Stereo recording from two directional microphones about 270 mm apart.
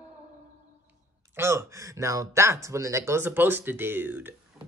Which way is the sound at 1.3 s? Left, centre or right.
Centre.